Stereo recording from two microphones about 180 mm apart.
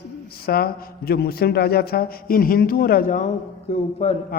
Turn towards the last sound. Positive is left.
turn(degrees=35)  # may be behind; listen again after turning